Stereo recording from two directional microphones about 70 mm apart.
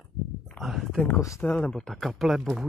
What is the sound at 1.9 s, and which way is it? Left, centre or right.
Speech, centre.